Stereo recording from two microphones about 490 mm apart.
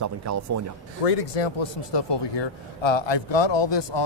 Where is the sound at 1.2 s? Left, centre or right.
Left.